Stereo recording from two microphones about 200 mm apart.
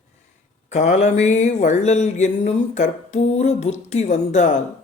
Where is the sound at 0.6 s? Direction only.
35° left (ahead or behind).